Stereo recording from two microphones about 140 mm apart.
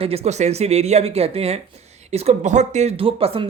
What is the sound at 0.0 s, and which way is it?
Speech, 45° right (ahead or behind).